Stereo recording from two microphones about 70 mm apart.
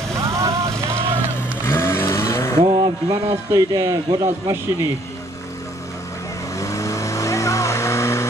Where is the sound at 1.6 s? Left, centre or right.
Left.